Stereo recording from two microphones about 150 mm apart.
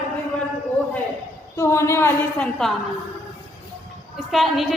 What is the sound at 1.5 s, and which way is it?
Speech, 20° left (ahead or behind).